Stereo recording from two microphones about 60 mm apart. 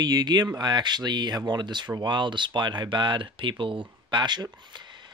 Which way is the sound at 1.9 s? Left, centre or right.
Right.